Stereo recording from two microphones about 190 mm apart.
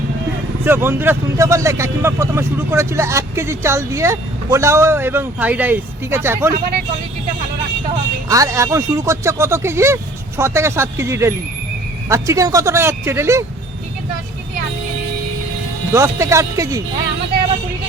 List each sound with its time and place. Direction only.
0.6 s speech: 10° right (ahead or behind)
8.3 s speech: 15° right (ahead or behind)
15.9 s speech: 15° right (ahead or behind)